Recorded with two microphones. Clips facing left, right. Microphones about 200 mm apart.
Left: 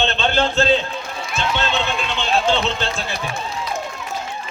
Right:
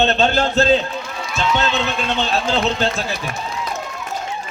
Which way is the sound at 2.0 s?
40° right (ahead or behind).